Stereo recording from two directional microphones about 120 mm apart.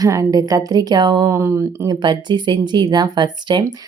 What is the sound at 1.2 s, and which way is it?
Speech, 20° right (ahead or behind).